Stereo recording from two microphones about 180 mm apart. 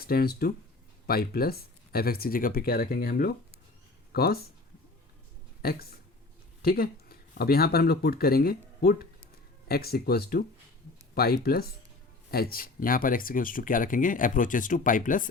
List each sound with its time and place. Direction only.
0.0 s speech: 55° left (ahead or behind)
5.6 s speech: 60° left (ahead or behind)